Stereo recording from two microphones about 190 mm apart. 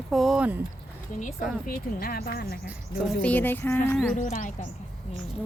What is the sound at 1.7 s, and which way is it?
Speech, 50° left (ahead or behind).